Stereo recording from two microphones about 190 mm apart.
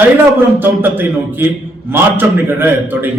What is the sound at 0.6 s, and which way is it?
A man's voice, 10° right (ahead or behind).